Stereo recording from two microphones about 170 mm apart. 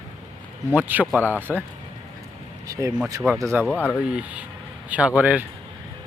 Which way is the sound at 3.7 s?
10° left (ahead or behind).